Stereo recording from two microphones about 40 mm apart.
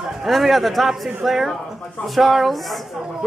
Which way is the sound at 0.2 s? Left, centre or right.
Centre.